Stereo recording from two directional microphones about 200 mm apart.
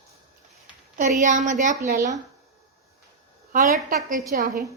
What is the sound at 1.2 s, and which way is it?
Speech, 40° right (ahead or behind).